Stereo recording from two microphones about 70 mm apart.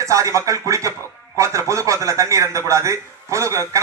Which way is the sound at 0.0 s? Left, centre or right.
Right.